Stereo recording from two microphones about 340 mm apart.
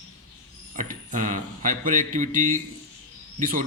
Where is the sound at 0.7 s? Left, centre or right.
Right.